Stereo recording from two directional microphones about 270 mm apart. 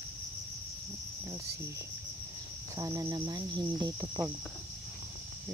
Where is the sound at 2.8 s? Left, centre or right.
Centre.